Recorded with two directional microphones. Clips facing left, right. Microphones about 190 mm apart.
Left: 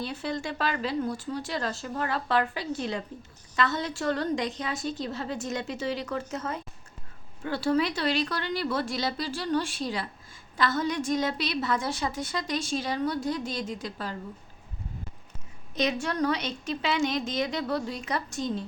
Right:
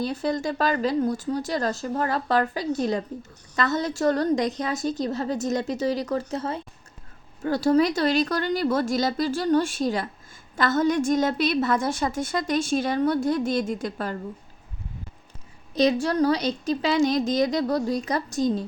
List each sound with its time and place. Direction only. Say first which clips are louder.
0.0 s a woman's voice: right 6 dB; 40° right (ahead or behind)
15.7 s a woman's voice: right 7 dB; 35° right (ahead or behind)